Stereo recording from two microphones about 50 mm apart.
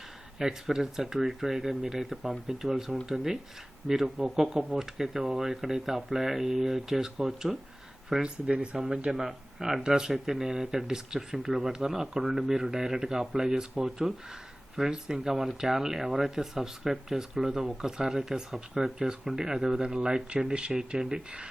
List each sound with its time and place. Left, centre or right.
0.3 s speech: centre
8.2 s speech: right
8.7 s speech: centre